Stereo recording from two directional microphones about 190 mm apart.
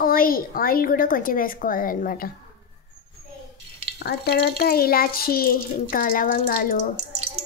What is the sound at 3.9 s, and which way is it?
A child's voice, 55° left (ahead or behind).